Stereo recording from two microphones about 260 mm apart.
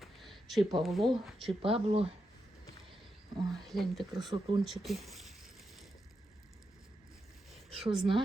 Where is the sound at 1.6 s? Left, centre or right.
Right.